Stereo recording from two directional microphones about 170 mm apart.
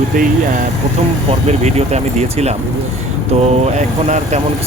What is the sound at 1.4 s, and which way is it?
Speech, 40° right (ahead or behind).